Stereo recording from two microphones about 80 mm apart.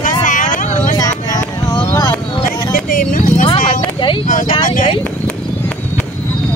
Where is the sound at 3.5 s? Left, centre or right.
Left.